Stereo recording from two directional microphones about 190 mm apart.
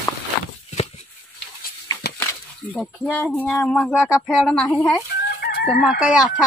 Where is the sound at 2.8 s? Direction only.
5° left (ahead or behind).